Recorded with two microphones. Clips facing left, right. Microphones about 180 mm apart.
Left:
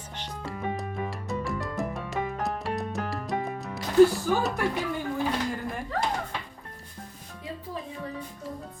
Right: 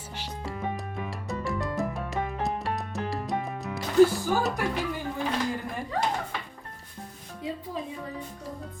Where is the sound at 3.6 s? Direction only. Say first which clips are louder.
Left 1 dB; centre (ahead or behind).